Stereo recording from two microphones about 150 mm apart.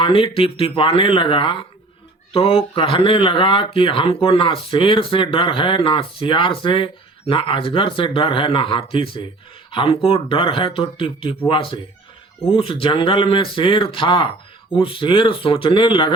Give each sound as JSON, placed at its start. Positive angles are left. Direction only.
{"t": 0.0, "sound": "speech", "side_deg": 35}